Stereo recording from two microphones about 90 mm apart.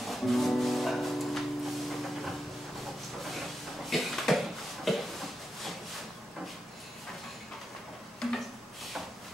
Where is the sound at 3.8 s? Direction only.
Centre (ahead or behind).